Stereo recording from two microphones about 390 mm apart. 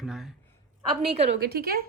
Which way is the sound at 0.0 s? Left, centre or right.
Centre.